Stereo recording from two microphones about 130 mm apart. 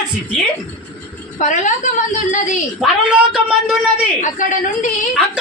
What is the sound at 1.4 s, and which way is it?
Speech, 75° left (ahead or behind).